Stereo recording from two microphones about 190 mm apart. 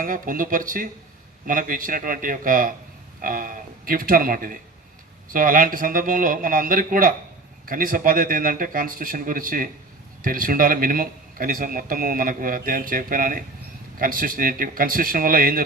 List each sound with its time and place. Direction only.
0.0 s a man's voice: 45° right (ahead or behind)